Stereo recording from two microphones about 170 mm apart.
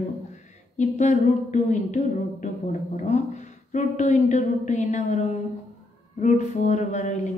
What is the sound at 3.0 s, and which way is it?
A woman's voice, 45° left (ahead or behind).